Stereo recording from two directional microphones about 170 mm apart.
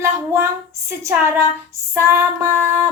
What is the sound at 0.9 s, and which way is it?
Speech, 15° right (ahead or behind).